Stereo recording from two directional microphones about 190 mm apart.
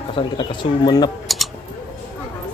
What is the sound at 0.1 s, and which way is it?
Speech, 25° left (ahead or behind).